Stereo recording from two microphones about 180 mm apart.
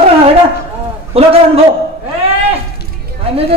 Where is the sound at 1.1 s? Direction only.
35° right (ahead or behind).